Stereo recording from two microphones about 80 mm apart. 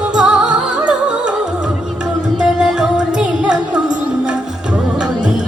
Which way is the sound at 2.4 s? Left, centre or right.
Centre.